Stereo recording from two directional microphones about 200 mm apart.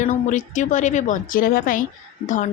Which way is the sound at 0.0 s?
40° left (ahead or behind).